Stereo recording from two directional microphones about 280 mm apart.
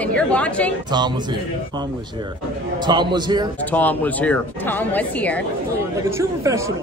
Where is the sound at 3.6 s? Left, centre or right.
Centre.